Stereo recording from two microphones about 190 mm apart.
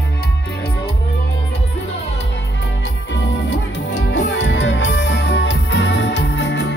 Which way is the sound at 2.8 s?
65° left (ahead or behind).